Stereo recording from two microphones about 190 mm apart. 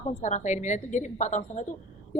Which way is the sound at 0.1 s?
35° left (ahead or behind).